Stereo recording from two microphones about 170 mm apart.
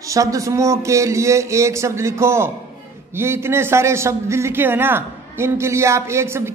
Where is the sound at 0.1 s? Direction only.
20° right (ahead or behind).